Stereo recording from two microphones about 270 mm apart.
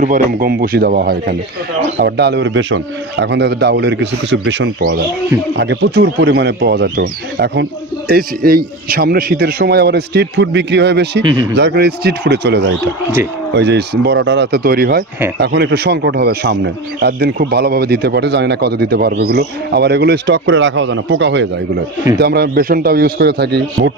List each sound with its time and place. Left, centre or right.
0.0 s speech: right